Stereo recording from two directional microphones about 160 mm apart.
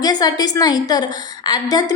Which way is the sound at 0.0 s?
25° left (ahead or behind).